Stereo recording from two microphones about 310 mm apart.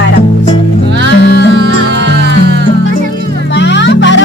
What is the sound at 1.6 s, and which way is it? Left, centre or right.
Music, right.